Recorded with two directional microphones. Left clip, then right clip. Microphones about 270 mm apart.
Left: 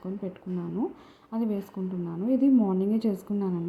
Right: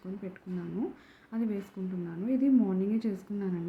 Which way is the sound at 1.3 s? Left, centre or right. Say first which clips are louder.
Left 4 dB; centre.